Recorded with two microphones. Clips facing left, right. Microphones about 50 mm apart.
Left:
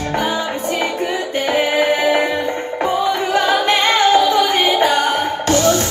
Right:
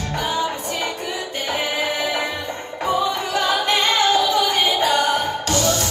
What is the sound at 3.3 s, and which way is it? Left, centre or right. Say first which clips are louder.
Music: left 5 dB; left.